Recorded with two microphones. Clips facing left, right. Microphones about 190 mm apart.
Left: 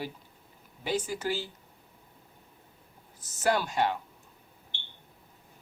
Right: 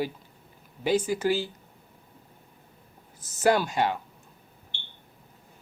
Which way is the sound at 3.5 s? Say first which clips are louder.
Right 4 dB; 10° right (ahead or behind).